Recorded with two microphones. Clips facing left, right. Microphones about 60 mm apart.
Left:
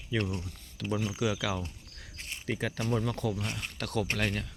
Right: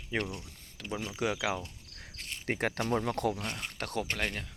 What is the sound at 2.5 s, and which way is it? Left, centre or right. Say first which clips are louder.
Speech: right 1 dB; right.